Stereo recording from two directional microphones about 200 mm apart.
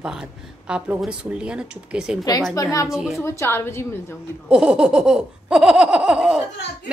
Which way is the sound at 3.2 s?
15° left (ahead or behind).